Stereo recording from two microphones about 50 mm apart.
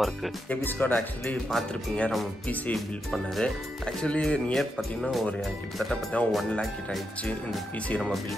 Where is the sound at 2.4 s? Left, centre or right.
Left.